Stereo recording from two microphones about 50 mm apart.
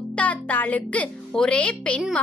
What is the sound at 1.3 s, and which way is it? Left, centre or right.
Speech, centre.